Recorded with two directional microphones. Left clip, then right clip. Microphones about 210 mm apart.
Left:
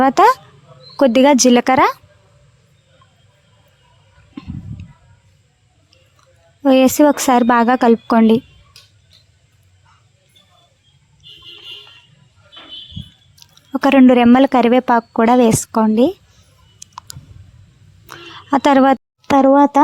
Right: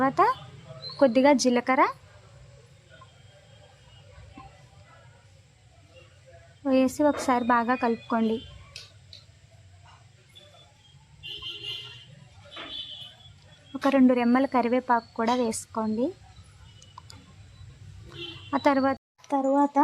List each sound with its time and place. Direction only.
0.0 s speech: 45° left (ahead or behind)
6.6 s speech: 45° left (ahead or behind)
13.8 s speech: 45° left (ahead or behind)
16.8 s clicking: 40° left (ahead or behind)
18.1 s a sound: 45° left (ahead or behind)